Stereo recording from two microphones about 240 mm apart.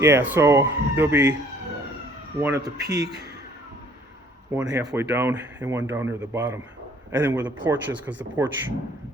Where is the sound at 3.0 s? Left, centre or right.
Right.